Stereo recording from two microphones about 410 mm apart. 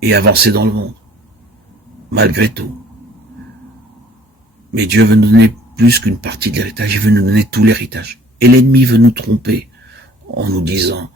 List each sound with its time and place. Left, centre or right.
0.0 s speech: right
2.1 s speech: right
4.7 s speech: right